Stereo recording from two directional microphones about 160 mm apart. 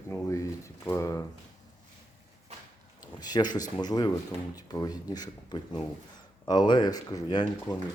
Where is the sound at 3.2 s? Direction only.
25° left (ahead or behind).